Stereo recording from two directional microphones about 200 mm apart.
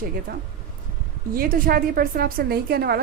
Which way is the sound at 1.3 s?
45° right (ahead or behind).